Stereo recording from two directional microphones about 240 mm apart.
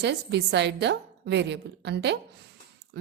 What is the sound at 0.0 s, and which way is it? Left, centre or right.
Speech, right.